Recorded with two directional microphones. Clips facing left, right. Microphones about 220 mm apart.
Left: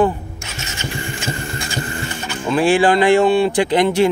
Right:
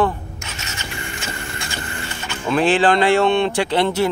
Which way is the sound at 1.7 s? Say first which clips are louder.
Left 5 dB; 35° left (ahead or behind).